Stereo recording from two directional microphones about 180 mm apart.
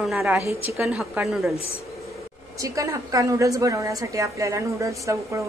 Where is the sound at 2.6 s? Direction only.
20° right (ahead or behind).